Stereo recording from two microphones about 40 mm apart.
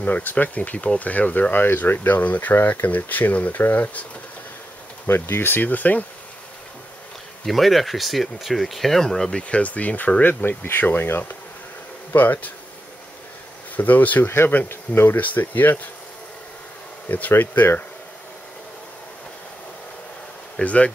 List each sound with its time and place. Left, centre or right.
0.0 s speech: left
0.6 s speech: left
1.5 s speech: left
2.0 s speech: left
5.0 s speech: left
7.4 s speech: centre
9.3 s speech: left
10.6 s speech: left
12.1 s speech: left
13.7 s speech: left
14.3 s speech: left
15.2 s speech: left
17.3 s speech: left
20.6 s speech: left